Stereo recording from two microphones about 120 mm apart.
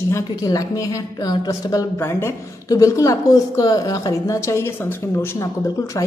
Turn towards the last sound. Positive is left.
turn(degrees=30)  # may be behind; listen again after turning